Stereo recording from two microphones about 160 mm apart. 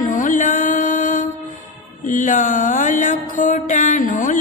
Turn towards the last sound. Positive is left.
turn(degrees=55)  # may be behind; listen again after turning